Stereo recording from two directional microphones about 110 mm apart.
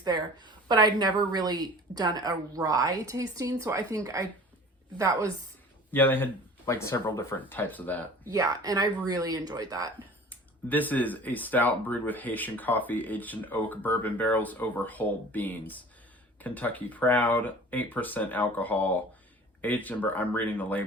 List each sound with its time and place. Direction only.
0.0 s a woman's voice: 40° right (ahead or behind)
5.9 s speech: 20° left (ahead or behind)
7.3 s speech: 15° left (ahead or behind)
8.3 s a woman's voice: 35° right (ahead or behind)
10.2 s speech: 15° left (ahead or behind)